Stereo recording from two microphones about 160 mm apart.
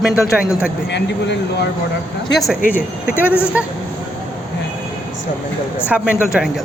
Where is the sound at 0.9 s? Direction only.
90° left.